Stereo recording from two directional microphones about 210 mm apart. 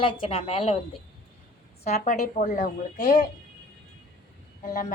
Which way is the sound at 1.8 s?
30° left (ahead or behind).